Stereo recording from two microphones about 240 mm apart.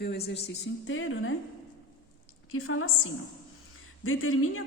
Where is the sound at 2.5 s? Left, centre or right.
Left.